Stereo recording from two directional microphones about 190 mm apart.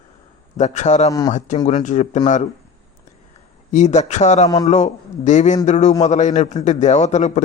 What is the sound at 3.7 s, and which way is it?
Speech, 40° left (ahead or behind).